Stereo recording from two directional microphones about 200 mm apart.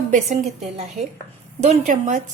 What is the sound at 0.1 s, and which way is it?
A woman's voice, 35° right (ahead or behind).